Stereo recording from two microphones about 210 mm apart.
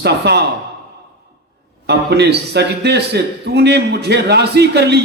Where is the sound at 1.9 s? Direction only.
50° right (ahead or behind).